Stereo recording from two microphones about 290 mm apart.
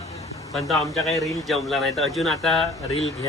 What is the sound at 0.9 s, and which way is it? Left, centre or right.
A man's voice, centre.